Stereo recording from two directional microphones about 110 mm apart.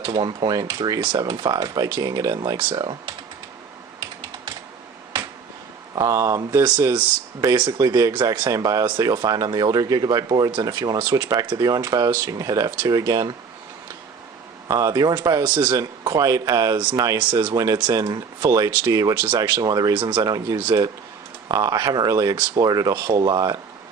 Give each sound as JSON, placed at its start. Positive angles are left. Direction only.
{"t": 0.0, "sound": "speech", "side_deg": -45}
{"t": 2.4, "sound": "speech", "side_deg": -45}
{"t": 5.9, "sound": "speech", "side_deg": -35}
{"t": 7.5, "sound": "speech", "side_deg": -45}
{"t": 7.8, "sound": "speech", "side_deg": -30}
{"t": 8.1, "sound": "speech", "side_deg": -40}
{"t": 14.7, "sound": "speech", "side_deg": -30}
{"t": 15.4, "sound": "speech", "side_deg": -45}
{"t": 15.7, "sound": "speech", "side_deg": -30}
{"t": 16.7, "sound": "speech", "side_deg": -45}
{"t": 17.4, "sound": "speech", "side_deg": -35}
{"t": 20.0, "sound": "speech", "side_deg": -50}
{"t": 20.2, "sound": "speech", "side_deg": -35}